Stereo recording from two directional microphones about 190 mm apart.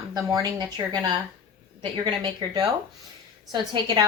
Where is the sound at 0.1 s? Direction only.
20° right (ahead or behind).